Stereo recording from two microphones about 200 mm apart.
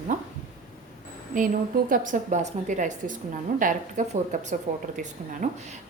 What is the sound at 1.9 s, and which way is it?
A woman's voice, 40° right (ahead or behind).